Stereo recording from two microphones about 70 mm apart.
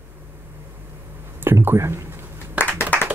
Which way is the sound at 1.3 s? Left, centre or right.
Right.